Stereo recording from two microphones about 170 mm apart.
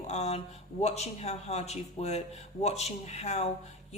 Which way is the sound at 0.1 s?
40° left (ahead or behind).